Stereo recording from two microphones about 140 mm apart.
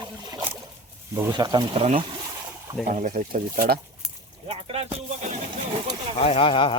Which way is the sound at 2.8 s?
65° right (ahead or behind).